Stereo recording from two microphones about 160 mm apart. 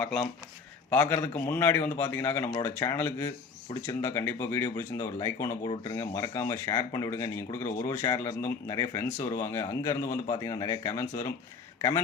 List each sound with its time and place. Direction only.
0.0 s speech: 5° left (ahead or behind); by 12.0 s 20° left (ahead or behind)